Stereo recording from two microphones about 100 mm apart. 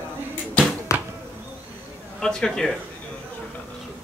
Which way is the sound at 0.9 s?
30° left (ahead or behind).